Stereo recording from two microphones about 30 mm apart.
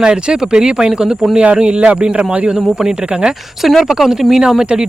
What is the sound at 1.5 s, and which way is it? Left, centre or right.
Speech, right.